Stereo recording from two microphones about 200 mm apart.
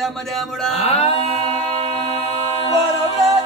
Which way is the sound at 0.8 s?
30° left (ahead or behind).